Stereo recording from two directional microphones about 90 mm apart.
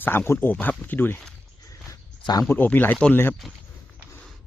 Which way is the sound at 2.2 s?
50° left (ahead or behind).